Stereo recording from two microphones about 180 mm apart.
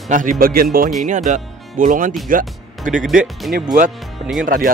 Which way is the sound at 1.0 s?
45° right (ahead or behind).